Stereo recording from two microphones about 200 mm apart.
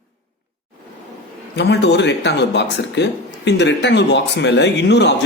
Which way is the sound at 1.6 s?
55° left (ahead or behind).